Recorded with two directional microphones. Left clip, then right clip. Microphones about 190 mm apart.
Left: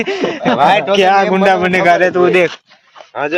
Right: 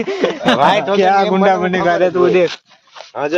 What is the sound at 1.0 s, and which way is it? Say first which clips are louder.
Speech: left 2 dB; centre (ahead or behind).